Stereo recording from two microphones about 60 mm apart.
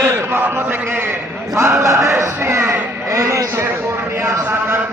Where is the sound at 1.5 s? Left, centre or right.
Right.